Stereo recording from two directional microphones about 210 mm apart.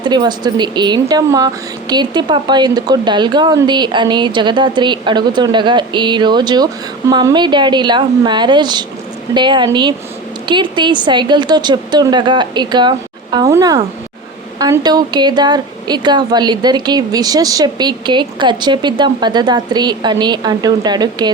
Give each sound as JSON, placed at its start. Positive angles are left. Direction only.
{"t": 0.0, "sound": "a woman's voice", "side_deg": -20}